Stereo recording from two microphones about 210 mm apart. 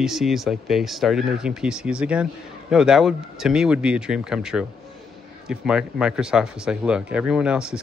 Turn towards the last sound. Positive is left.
turn(degrees=-5)  # may be behind; listen again after turning